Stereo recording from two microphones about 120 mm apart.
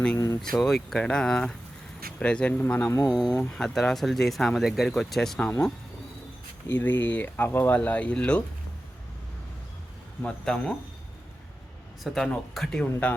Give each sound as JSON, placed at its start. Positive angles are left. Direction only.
{"t": 0.5, "sound": "speech", "side_deg": 0}
{"t": 2.9, "sound": "speech", "side_deg": 30}
{"t": 3.2, "sound": "speech", "side_deg": 5}
{"t": 10.2, "sound": "speech", "side_deg": 10}
{"t": 12.0, "sound": "speech", "side_deg": 5}